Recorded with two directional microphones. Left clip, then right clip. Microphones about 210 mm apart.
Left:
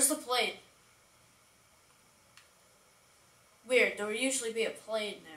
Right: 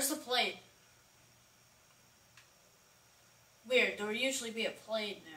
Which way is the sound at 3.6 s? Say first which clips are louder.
Left 3 dB; 45° left (ahead or behind).